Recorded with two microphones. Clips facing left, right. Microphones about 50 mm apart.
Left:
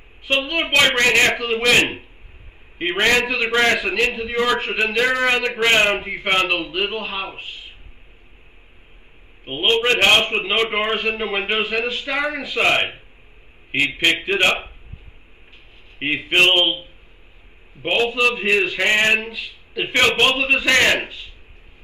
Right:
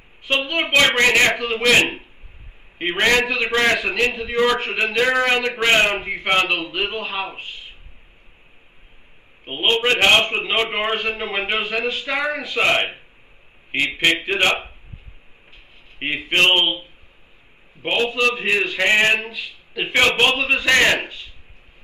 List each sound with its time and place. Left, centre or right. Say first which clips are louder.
0.2 s a man's voice: even; centre
2.8 s a man's voice: even; centre
9.4 s a man's voice: left 1 dB; centre
16.0 s a man's voice: left 1 dB; centre
17.8 s a man's voice: left 1 dB; centre